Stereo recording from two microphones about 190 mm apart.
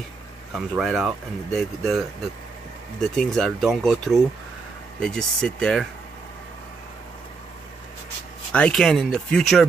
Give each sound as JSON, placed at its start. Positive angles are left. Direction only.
{"t": 0.5, "sound": "speech", "side_deg": 0}
{"t": 3.3, "sound": "speech", "side_deg": 0}
{"t": 8.5, "sound": "speech", "side_deg": 5}